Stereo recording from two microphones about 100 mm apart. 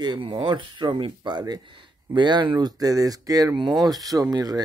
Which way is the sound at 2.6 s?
40° right (ahead or behind).